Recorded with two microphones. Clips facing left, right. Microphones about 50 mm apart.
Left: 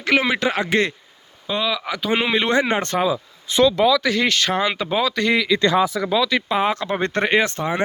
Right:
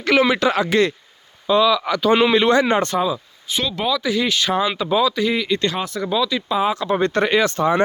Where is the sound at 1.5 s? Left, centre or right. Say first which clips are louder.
Right 7 dB; centre.